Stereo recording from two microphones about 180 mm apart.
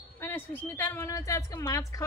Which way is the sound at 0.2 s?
10° left (ahead or behind).